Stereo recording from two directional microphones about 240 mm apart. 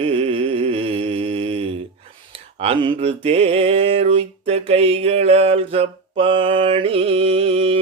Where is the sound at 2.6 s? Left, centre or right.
Right.